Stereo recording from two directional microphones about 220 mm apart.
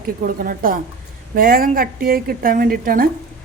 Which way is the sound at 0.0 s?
40° right (ahead or behind).